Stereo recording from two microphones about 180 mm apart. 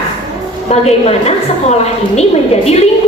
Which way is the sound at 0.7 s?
35° left (ahead or behind).